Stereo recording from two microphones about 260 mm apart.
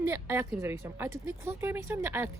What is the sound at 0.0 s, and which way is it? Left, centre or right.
A woman's voice, centre.